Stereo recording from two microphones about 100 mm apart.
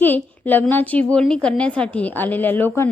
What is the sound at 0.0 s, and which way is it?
A woman's voice, 20° left (ahead or behind).